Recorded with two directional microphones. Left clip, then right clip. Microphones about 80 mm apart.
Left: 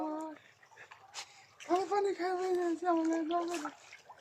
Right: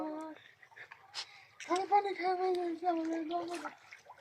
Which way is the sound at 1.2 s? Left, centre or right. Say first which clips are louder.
Right 3 dB; left.